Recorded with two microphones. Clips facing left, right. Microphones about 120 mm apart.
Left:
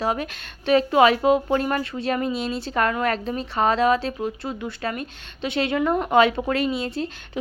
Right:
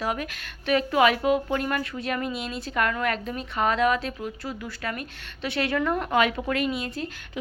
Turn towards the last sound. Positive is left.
turn(degrees=30)  # may be behind; listen again after turning